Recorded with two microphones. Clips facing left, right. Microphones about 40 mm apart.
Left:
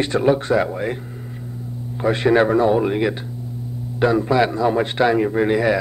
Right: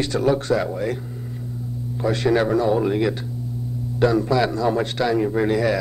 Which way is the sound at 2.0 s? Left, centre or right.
Left.